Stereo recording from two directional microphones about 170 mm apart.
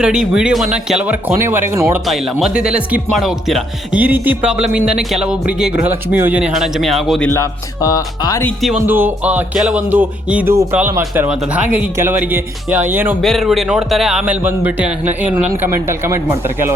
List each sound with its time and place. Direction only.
0.0 s speech: 5° right (ahead or behind)
2.0 s speech: centre (ahead or behind)
7.3 s music: 20° left (ahead or behind)
8.9 s speech: 10° right (ahead or behind)
13.2 s speech: centre (ahead or behind); by 16.2 s 15° right (ahead or behind)